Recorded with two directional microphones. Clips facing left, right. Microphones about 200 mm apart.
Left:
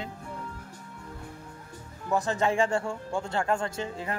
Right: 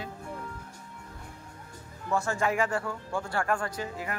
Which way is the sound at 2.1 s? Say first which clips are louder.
Left 2 dB; 20° left (ahead or behind).